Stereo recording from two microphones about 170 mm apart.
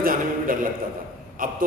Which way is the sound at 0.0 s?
55° right (ahead or behind).